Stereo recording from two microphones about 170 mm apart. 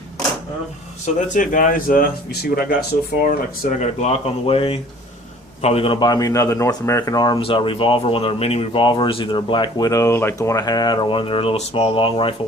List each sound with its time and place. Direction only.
1.0 s speech: 50° left (ahead or behind); by 2.7 s 65° left (ahead or behind)
3.2 s speech: 55° left (ahead or behind); by 12.3 s 30° left (ahead or behind)